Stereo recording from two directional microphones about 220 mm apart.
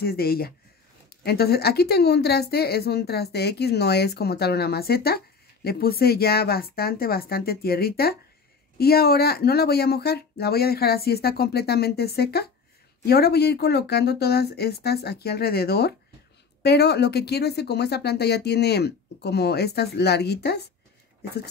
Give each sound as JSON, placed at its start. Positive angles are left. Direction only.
{"t": 0.0, "sound": "speech", "side_deg": 45}